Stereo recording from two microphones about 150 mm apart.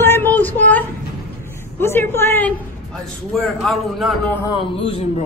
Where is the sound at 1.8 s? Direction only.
15° left (ahead or behind).